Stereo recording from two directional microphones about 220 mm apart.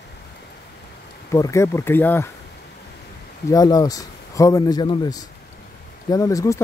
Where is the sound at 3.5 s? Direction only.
15° left (ahead or behind).